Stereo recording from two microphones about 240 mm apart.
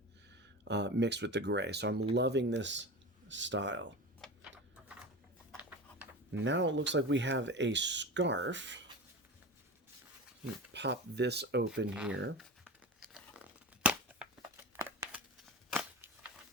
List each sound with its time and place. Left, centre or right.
0.6 s speech: right
4.2 s typewriter: centre
5.5 s a sound: centre
6.3 s speech: right
10.7 s speech: right
11.9 s speech: centre
12.4 s crumpling: centre
13.8 s a sound: centre